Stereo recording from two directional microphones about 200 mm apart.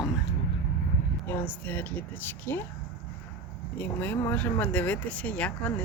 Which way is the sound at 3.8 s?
10° left (ahead or behind).